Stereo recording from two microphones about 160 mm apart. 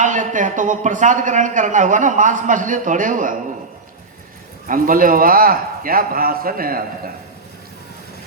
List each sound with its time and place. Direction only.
0.0 s a man's voice: 50° right (ahead or behind)
4.7 s a man's voice: 60° right (ahead or behind)